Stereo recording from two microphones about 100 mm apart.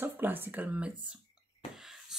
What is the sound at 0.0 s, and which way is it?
Speech, 20° right (ahead or behind).